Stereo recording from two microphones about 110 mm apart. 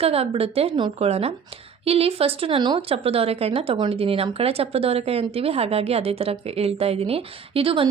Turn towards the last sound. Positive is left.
turn(degrees=-55)  # may be behind; listen again after turning